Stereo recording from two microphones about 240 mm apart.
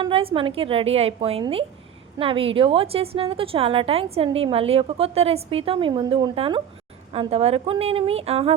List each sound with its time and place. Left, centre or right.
0.0 s a woman's voice: right